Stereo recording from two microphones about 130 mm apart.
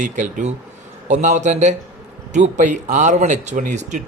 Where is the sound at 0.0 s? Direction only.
70° right (ahead or behind).